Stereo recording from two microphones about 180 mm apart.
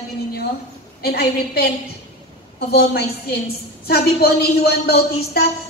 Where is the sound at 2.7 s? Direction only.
65° left (ahead or behind).